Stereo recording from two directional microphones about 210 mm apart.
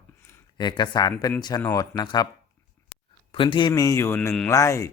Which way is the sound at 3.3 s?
25° left (ahead or behind).